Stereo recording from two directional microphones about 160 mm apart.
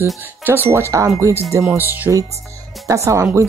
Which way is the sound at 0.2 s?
10° right (ahead or behind).